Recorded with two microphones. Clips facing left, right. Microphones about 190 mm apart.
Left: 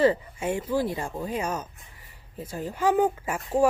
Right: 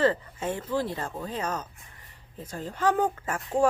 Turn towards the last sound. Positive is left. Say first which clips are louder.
# left 2 dB
turn(degrees=10)  # may be behind; listen again after turning